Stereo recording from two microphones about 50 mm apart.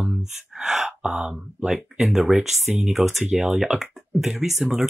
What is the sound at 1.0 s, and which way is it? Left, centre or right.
Speech, right.